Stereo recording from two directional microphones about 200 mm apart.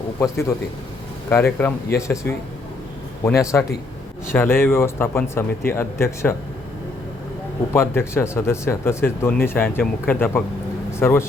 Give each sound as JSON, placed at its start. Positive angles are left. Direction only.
{"t": 0.2, "sound": "speech", "side_deg": 15}
{"t": 3.5, "sound": "speech", "side_deg": 10}
{"t": 7.7, "sound": "speech", "side_deg": 10}